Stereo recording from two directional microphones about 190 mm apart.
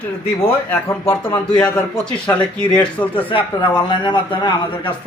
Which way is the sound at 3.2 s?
25° left (ahead or behind).